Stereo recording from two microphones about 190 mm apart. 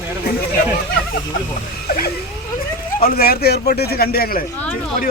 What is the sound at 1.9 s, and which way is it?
A man's voice, 50° left (ahead or behind).